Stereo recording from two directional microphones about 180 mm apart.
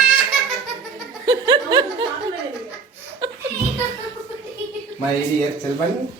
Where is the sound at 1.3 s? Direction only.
25° right (ahead or behind).